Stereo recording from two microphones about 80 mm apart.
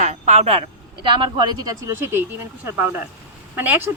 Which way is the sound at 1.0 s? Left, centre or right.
Right.